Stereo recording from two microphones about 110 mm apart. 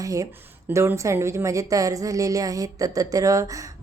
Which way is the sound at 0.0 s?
30° right (ahead or behind).